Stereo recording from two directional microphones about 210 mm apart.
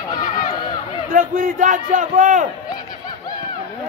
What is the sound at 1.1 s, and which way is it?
A man's voice, 40° right (ahead or behind).